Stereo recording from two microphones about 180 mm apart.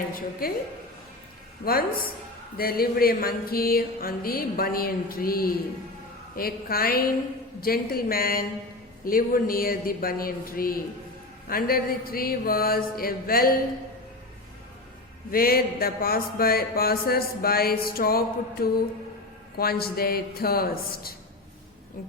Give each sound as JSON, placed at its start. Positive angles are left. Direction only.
{"t": 0.1, "sound": "speech", "side_deg": 55}
{"t": 1.6, "sound": "music", "side_deg": 55}
{"t": 9.0, "sound": "speech", "side_deg": 50}
{"t": 11.4, "sound": "music", "side_deg": 55}
{"t": 15.3, "sound": "music", "side_deg": 55}